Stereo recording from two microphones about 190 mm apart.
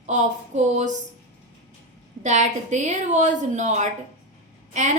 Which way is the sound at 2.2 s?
40° right (ahead or behind).